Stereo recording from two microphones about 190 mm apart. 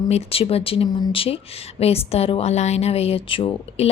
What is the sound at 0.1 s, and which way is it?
Speech, 30° left (ahead or behind).